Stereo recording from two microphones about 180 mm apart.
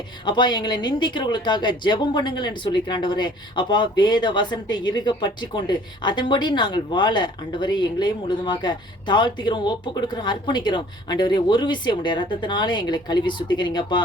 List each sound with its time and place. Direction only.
0.3 s speech: 25° left (ahead or behind)